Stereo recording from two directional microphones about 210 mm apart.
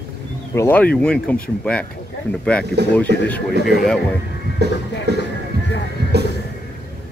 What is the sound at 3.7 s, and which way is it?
Speech, 50° right (ahead or behind).